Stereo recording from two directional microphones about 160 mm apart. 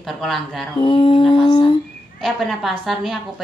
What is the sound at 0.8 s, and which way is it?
Speech, 35° left (ahead or behind).